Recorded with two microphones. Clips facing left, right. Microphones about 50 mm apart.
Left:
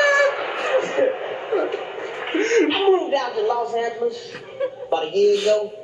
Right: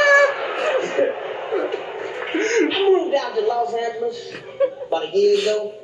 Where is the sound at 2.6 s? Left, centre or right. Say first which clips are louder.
Right 1 dB; left.